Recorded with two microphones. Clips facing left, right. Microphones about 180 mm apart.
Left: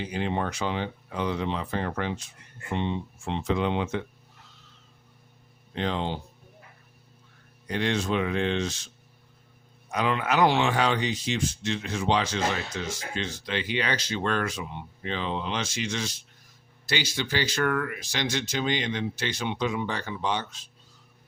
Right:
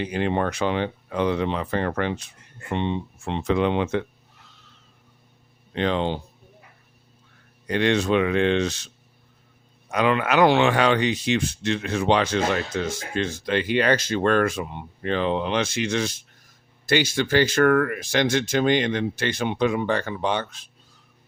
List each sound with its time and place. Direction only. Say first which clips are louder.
0.0 s speech: right 5 dB; 65° right (ahead or behind)
5.7 s speech: right 6 dB; 75° right (ahead or behind)
7.7 s speech: right 6 dB; 70° right (ahead or behind)
9.9 s speech: right 5 dB; 70° right (ahead or behind)